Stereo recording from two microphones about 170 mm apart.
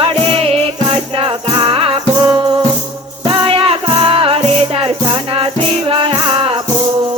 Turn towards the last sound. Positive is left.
turn(degrees=-30)  # may be behind; listen again after turning